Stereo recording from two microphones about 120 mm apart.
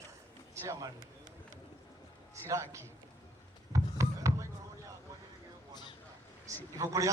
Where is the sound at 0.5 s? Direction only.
25° right (ahead or behind).